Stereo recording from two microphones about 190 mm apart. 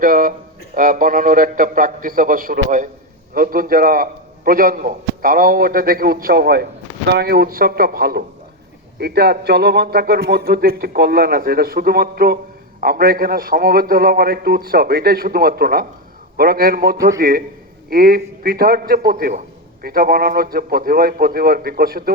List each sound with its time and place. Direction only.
0.0 s a man's voice: 50° right (ahead or behind)